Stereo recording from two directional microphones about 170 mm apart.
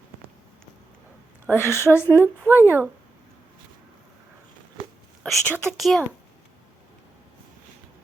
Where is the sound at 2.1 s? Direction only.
15° right (ahead or behind).